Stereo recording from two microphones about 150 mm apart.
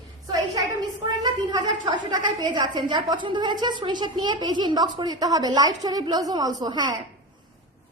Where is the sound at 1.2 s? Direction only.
30° right (ahead or behind).